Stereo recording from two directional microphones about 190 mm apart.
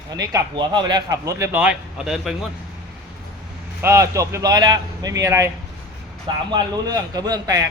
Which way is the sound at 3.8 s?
15° right (ahead or behind).